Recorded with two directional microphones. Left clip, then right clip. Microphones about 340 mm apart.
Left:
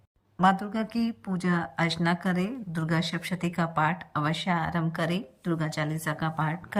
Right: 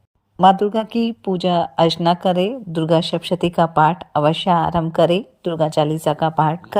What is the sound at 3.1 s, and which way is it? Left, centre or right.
Speech, right.